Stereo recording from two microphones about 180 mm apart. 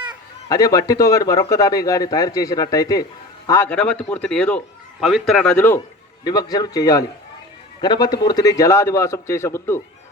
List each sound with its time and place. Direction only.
0.4 s speech: 20° left (ahead or behind)
6.2 s a man's voice: 20° left (ahead or behind)